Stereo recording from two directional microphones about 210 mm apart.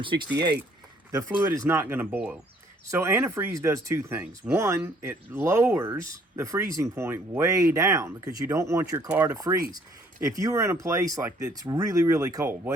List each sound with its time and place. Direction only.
1.1 s speech: 15° right (ahead or behind)